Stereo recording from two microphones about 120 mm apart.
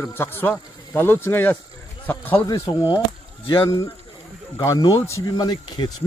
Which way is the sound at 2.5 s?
35° left (ahead or behind).